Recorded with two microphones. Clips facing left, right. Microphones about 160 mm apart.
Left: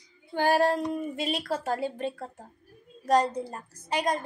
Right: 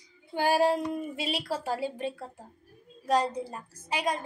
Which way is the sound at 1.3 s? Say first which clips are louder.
Left 1 dB; 10° right (ahead or behind).